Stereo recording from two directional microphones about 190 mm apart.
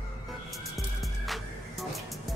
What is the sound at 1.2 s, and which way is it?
Music, centre (ahead or behind).